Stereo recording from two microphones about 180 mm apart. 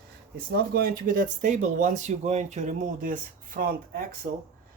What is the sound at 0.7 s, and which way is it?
Speech, 55° right (ahead or behind).